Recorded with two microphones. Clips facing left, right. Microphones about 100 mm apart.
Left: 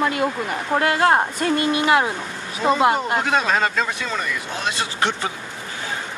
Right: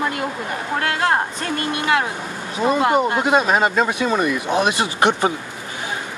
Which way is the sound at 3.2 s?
15° right (ahead or behind).